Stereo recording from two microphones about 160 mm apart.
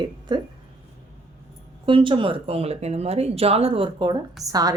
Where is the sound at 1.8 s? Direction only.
30° right (ahead or behind).